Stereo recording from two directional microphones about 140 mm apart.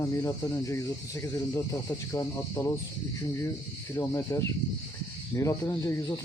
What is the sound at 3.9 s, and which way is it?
Speech, 20° left (ahead or behind).